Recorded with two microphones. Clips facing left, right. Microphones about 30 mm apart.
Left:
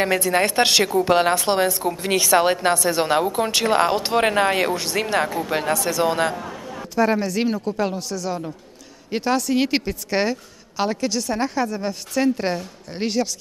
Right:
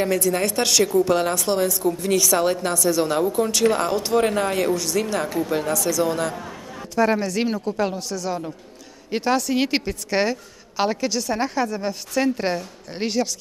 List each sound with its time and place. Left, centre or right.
0.0 s a woman's voice: left
6.3 s a sound: centre
7.0 s a woman's voice: centre